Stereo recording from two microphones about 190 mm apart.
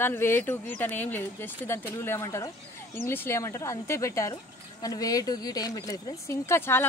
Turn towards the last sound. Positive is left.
turn(degrees=10)  # may be behind; listen again after turning